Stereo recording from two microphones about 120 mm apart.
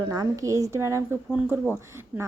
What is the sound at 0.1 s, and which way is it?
A woman's voice, 30° right (ahead or behind).